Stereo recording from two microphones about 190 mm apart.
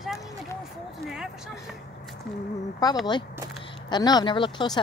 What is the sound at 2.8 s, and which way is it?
Speech, 20° left (ahead or behind).